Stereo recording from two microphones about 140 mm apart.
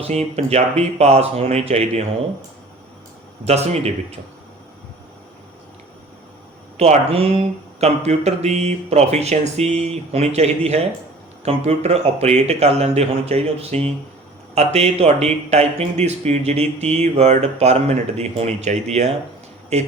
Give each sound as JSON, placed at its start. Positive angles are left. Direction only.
{"t": 0.0, "sound": "speech", "side_deg": -50}
{"t": 3.4, "sound": "speech", "side_deg": -50}
{"t": 6.7, "sound": "speech", "side_deg": -50}